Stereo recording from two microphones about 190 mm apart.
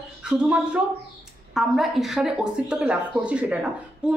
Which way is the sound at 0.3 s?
5° right (ahead or behind).